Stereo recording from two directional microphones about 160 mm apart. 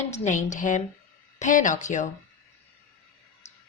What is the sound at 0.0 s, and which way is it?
A woman's voice, 45° left (ahead or behind).